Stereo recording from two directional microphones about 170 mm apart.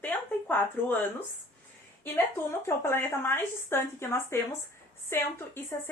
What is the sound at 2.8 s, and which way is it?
A woman's voice, 15° left (ahead or behind).